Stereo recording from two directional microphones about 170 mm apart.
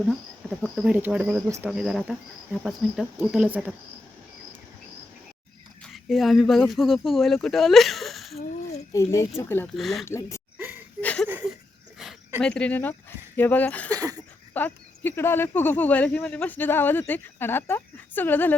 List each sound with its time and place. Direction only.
0.6 s speech: 5° right (ahead or behind)
1.7 s speech: 5° right (ahead or behind)
5.9 s speech: centre (ahead or behind)
8.9 s speech: 15° left (ahead or behind)
9.7 s speech: centre (ahead or behind)
10.1 s speech: 15° left (ahead or behind)
10.6 s a sound: 10° right (ahead or behind)
11.0 s a sound: 5° left (ahead or behind)
11.3 s a sound: 10° right (ahead or behind)
12.4 s speech: 5° left (ahead or behind)
13.9 s a sound: 20° right (ahead or behind)
14.5 s speech: 10° left (ahead or behind)